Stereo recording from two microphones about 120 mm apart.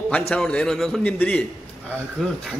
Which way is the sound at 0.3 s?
5° left (ahead or behind).